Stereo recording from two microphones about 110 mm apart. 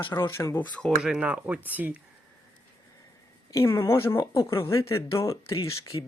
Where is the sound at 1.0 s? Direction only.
10° right (ahead or behind).